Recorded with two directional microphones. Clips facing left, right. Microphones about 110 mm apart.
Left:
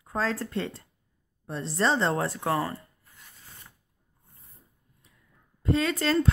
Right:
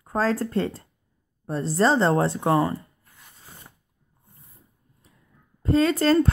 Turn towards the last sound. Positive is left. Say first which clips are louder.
# right 6 dB
turn(degrees=-40)  # may be behind; listen again after turning